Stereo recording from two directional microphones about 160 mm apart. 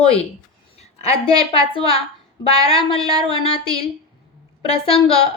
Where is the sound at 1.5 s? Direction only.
35° left (ahead or behind).